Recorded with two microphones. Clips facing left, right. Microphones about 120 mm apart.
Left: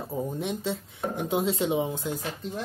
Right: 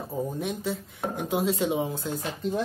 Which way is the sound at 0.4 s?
25° left (ahead or behind).